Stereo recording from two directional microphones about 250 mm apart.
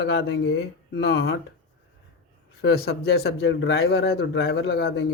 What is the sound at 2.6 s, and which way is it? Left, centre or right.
Speech, left.